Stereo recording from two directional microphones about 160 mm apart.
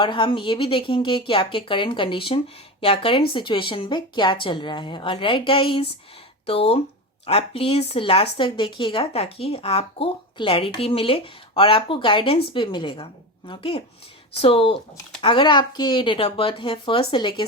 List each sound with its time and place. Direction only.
0.0 s a woman's voice: 30° left (ahead or behind)